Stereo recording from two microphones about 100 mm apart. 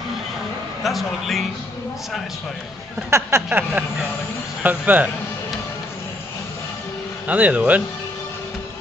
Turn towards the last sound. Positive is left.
turn(degrees=-15)  # may be behind; listen again after turning